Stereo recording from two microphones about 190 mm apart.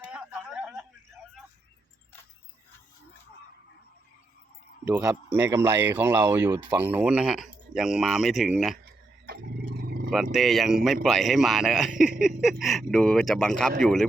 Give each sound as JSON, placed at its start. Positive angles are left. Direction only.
{"t": 0.0, "sound": "a sound", "side_deg": -5}
{"t": 4.9, "sound": "speech", "side_deg": -10}
{"t": 8.8, "sound": "dog", "side_deg": -55}
{"t": 10.3, "sound": "speech", "side_deg": 0}